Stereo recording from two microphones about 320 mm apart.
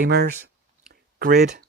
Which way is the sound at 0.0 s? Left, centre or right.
Right.